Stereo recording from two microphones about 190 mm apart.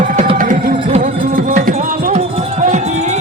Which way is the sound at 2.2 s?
35° right (ahead or behind).